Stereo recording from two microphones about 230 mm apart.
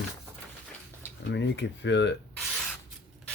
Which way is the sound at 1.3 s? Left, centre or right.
Left.